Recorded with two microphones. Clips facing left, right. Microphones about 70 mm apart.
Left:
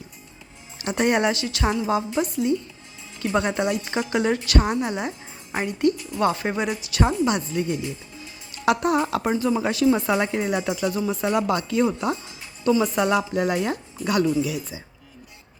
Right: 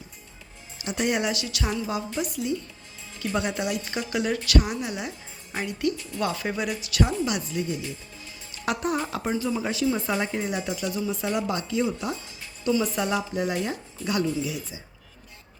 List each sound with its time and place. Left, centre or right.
0.8 s a woman's voice: left
3.5 s a woman's voice: left
6.0 s speech: centre
6.2 s speech: left
8.6 s speech: left
9.6 s a woman's voice: left
11.0 s a woman's voice: left
13.0 s a woman's voice: left